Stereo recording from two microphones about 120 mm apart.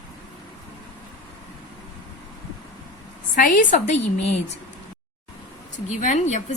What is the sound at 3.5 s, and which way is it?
Speech, 75° left (ahead or behind).